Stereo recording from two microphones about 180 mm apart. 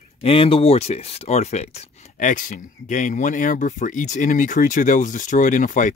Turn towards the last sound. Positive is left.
turn(degrees=45)  # may be behind; listen again after turning